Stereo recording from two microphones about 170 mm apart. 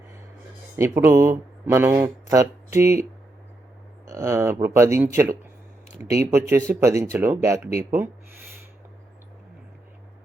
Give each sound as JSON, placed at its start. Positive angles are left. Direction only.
{"t": 0.8, "sound": "speech", "side_deg": -15}
{"t": 4.1, "sound": "speech", "side_deg": -15}